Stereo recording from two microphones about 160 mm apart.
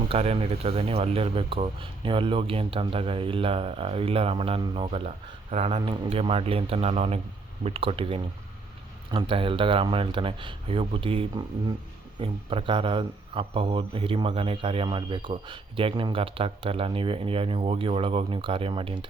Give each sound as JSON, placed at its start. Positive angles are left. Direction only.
{"t": 0.1, "sound": "speech", "side_deg": -35}